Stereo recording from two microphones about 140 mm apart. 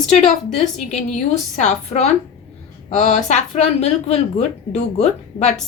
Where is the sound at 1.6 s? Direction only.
55° left (ahead or behind).